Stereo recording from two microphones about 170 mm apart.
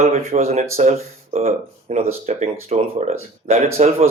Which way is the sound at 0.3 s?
40° right (ahead or behind).